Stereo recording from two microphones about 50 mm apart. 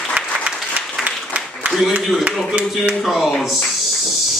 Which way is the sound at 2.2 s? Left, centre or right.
Centre.